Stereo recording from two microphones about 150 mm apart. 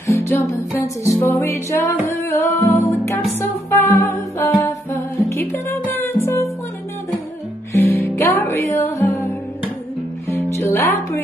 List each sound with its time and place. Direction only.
0.0 s music: 20° left (ahead or behind)
7.8 s music: 15° left (ahead or behind)
10.3 s music: 15° left (ahead or behind)